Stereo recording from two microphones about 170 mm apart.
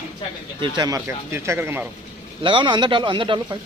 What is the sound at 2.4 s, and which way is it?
Speech, 30° right (ahead or behind).